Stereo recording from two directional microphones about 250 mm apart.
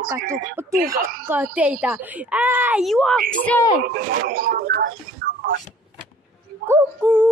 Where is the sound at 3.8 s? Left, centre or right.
Right.